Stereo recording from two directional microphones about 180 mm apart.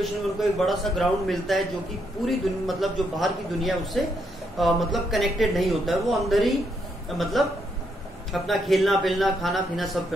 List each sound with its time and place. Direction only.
0.0 s speech: centre (ahead or behind)